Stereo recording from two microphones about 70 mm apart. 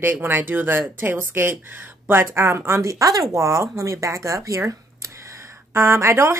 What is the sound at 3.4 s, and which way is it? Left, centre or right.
Speech, right.